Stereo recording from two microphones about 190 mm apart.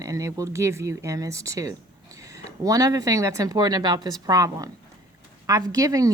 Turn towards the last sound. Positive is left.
turn(degrees=-15)  # may be behind; listen again after turning